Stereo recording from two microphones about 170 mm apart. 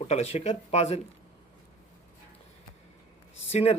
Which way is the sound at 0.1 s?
40° left (ahead or behind).